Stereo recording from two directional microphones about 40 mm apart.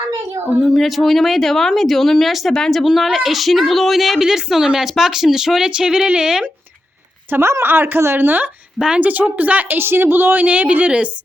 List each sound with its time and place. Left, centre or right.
0.6 s speech: centre
2.8 s a woman's voice: centre
5.6 s a sound: centre
7.3 s speech: right
9.0 s a woman's voice: right
9.7 s speech: right
10.4 s a woman's voice: right